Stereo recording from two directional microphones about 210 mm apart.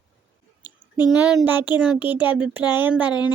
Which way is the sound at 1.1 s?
5° right (ahead or behind).